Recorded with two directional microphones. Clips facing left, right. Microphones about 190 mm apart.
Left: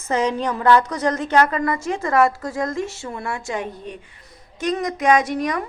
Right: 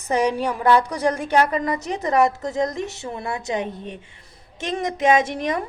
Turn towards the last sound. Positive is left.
turn(degrees=-25)  # may be behind; listen again after turning